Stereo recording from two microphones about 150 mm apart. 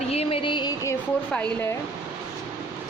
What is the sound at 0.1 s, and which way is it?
Music, 40° left (ahead or behind).